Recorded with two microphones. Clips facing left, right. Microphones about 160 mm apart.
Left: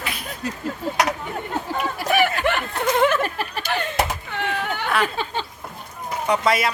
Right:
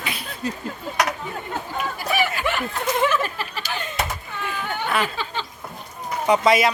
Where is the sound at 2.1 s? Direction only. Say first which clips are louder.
Left 4 dB; 60° left (ahead or behind).